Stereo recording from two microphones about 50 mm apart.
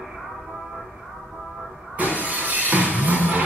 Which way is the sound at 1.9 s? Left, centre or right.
Right.